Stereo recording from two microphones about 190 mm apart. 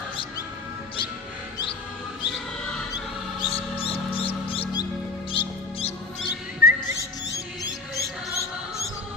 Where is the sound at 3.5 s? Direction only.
30° left (ahead or behind).